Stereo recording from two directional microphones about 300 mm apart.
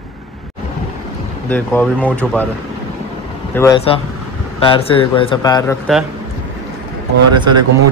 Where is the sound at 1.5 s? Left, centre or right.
Centre.